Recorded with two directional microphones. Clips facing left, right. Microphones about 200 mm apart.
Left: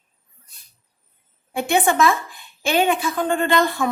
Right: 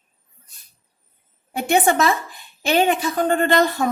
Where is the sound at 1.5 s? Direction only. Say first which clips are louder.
Right 1 dB; 40° right (ahead or behind).